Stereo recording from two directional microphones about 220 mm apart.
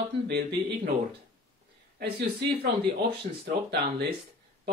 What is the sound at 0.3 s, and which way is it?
Speech, 50° right (ahead or behind).